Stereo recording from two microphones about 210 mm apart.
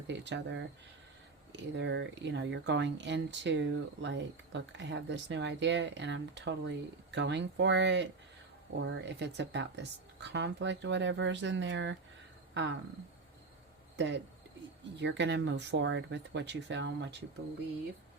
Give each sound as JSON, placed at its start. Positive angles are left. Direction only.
{"t": 0.1, "sound": "speech", "side_deg": -55}
{"t": 13.9, "sound": "speech", "side_deg": -55}